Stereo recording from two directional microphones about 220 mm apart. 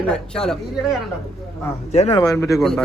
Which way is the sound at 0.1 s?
5° left (ahead or behind).